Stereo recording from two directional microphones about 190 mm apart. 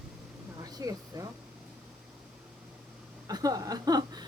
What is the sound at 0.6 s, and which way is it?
Speech, 20° right (ahead or behind).